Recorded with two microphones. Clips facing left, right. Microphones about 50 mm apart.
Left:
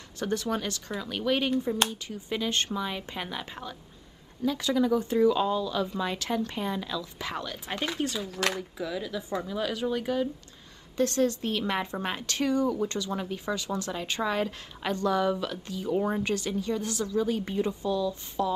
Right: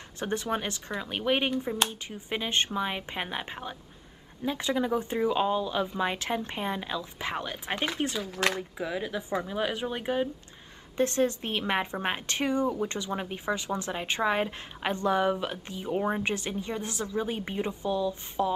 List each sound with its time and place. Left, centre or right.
0.2 s speech: right